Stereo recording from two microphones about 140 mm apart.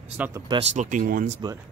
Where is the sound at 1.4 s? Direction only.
35° right (ahead or behind).